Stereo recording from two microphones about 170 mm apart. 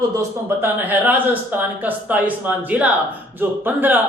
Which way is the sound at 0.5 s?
10° right (ahead or behind).